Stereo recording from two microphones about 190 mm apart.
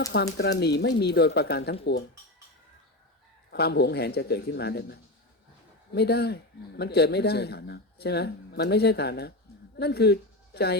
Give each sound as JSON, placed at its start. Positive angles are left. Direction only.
{"t": 0.3, "sound": "a man's voice", "side_deg": 60}
{"t": 3.5, "sound": "a man's voice", "side_deg": 60}